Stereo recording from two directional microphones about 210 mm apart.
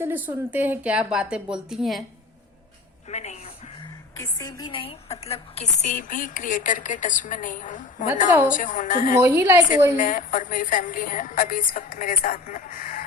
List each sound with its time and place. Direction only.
0.0 s a woman's voice: 10° right (ahead or behind)
3.1 s a woman's voice: 30° left (ahead or behind)
4.2 s a woman's voice: 15° left (ahead or behind); by 9.1 s 40° left (ahead or behind)
9.1 s a woman's voice: 10° right (ahead or behind)
10.0 s a woman's voice: 40° left (ahead or behind)